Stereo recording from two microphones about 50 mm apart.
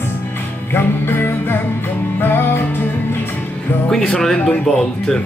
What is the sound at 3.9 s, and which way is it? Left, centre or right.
Music, centre.